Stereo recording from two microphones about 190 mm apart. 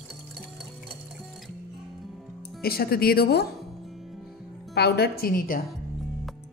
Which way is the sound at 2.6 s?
55° left (ahead or behind).